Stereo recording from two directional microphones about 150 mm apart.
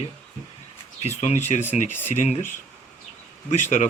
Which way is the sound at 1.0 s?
45° left (ahead or behind).